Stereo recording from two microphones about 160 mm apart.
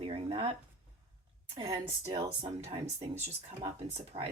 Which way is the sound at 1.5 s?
30° right (ahead or behind).